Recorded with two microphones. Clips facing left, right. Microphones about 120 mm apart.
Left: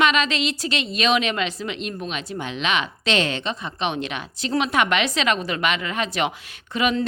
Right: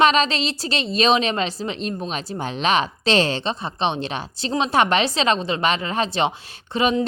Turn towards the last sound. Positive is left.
turn(degrees=-30)  # may be behind; listen again after turning